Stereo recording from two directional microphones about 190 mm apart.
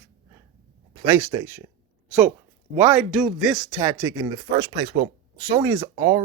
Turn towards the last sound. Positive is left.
turn(degrees=-20)  # may be behind; listen again after turning